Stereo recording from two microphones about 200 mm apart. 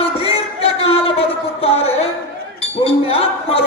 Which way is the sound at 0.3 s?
30° left (ahead or behind).